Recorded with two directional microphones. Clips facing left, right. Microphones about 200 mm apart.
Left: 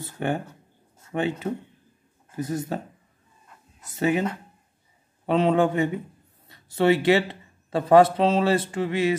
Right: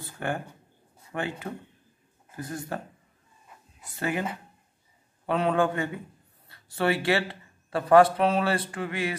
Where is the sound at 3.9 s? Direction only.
20° left (ahead or behind).